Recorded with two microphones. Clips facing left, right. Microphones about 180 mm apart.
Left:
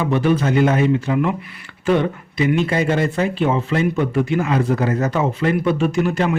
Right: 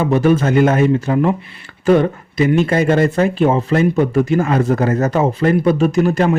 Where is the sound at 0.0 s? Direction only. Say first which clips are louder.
Right 4 dB; 45° right (ahead or behind).